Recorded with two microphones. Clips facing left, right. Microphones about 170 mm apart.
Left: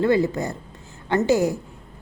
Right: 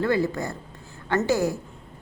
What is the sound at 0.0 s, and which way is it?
A woman's voice, 20° left (ahead or behind).